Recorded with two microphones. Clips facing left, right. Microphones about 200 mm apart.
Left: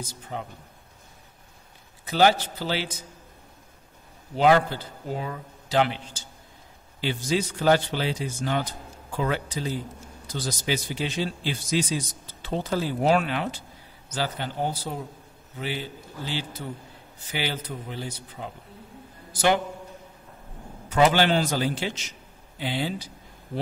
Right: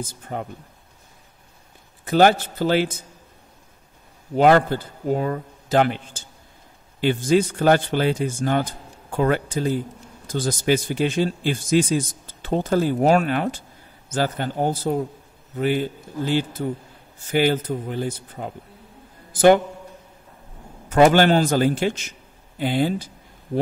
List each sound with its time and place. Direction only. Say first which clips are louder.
0.0 s speech: right 5 dB; 50° right (ahead or behind)
2.0 s speech: right 5 dB; 50° right (ahead or behind)
4.4 s a man's voice: right 4 dB; 50° right (ahead or behind)
20.9 s speech: right 6 dB; 50° right (ahead or behind)